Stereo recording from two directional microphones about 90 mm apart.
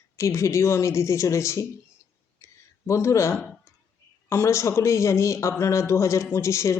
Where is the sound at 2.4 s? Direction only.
35° left (ahead or behind).